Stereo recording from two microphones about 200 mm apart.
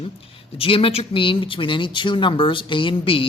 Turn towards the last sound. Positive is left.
turn(degrees=25)  # may be behind; listen again after turning